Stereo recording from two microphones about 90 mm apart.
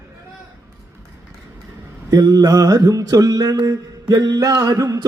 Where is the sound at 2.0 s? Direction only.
45° right (ahead or behind).